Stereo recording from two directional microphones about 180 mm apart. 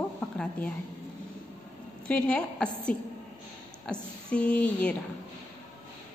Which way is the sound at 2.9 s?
50° left (ahead or behind).